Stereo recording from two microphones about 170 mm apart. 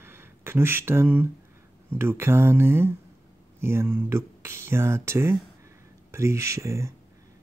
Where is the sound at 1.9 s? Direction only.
15° right (ahead or behind).